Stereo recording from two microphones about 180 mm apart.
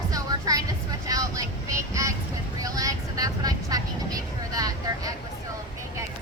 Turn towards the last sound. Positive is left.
turn(degrees=-20)  # may be behind; listen again after turning